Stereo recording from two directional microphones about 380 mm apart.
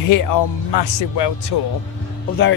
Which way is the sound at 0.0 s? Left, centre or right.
Left.